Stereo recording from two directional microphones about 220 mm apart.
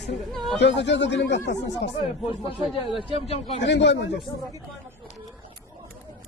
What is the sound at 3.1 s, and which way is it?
Speech, 25° left (ahead or behind).